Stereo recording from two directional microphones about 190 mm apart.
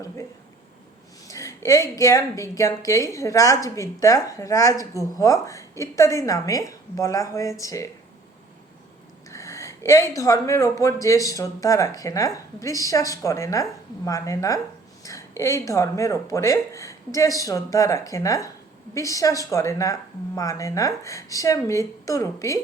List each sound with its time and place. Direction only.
1.3 s speech: 15° left (ahead or behind)
9.3 s a sound: 15° left (ahead or behind)
10.2 s speech: 15° left (ahead or behind)